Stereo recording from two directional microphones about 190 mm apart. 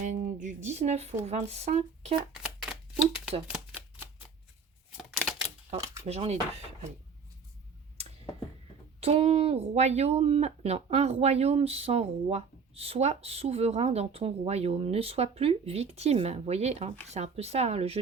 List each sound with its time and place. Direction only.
0.0 s speech: 40° right (ahead or behind)
2.4 s shuffling cards: 5° right (ahead or behind)
4.9 s a sound: centre (ahead or behind)
6.1 s speech: 35° right (ahead or behind)
9.0 s speech: 30° right (ahead or behind)